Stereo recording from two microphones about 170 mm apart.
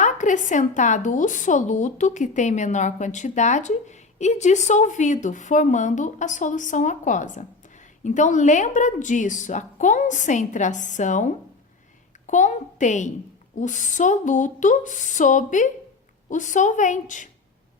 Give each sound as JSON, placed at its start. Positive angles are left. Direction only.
{"t": 0.0, "sound": "a woman's voice", "side_deg": 45}